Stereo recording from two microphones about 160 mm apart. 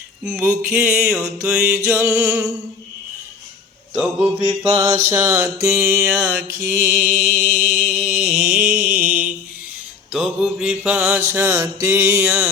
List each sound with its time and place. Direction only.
0.3 s mantra: 10° right (ahead or behind)
3.9 s mantra: 10° right (ahead or behind)
7.1 s a sound: 5° left (ahead or behind)
8.9 s mantra: 10° right (ahead or behind)